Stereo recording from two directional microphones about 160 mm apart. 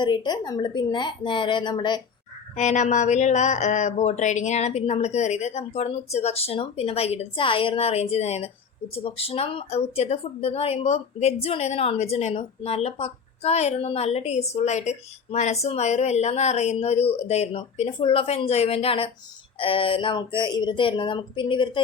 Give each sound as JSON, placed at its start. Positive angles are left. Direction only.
{"t": 0.0, "sound": "a woman's voice", "side_deg": 30}
{"t": 2.6, "sound": "speech", "side_deg": 50}